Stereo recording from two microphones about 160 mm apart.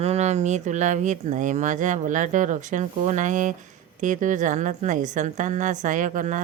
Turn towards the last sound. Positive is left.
turn(degrees=-55)  # may be behind; listen again after turning